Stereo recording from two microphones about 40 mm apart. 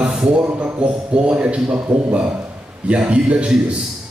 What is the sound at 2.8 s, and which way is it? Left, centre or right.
Speech, right.